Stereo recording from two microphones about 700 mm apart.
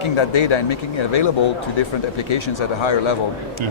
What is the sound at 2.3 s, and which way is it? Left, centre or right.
Speech, left.